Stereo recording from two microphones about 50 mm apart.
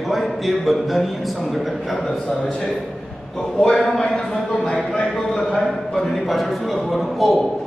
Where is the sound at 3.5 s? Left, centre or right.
Centre.